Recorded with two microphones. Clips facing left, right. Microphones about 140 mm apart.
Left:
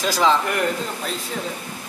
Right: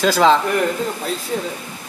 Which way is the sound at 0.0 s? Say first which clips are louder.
Right 5 dB; 65° right (ahead or behind).